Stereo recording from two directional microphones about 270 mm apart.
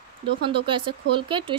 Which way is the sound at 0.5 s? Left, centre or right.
Centre.